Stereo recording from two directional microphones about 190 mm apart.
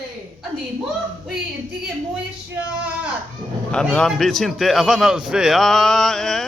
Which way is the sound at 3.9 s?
5° left (ahead or behind).